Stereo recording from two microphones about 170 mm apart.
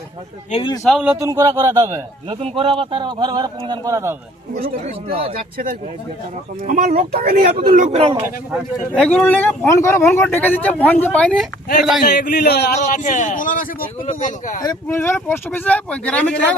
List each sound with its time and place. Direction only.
0.5 s a man's voice: 45° left (ahead or behind)
0.9 s speech: 5° right (ahead or behind)
1.2 s speech: 20° right (ahead or behind)
2.3 s speech: 35° right (ahead or behind); by 4.2 s 15° right (ahead or behind)
4.8 s speech: 35° right (ahead or behind)
6.6 s speech: 50° right (ahead or behind)
7.9 s speech: 35° right (ahead or behind)
9.0 s speech: 5° left (ahead or behind)
12.1 s a man's voice: 75° left (ahead or behind)
12.8 s a man's voice: 50° left (ahead or behind)
14.6 s speech: 20° left (ahead or behind)